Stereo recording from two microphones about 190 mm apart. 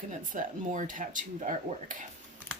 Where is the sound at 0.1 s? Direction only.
40° right (ahead or behind).